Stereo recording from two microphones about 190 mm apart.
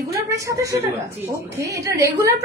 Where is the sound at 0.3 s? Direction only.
15° right (ahead or behind).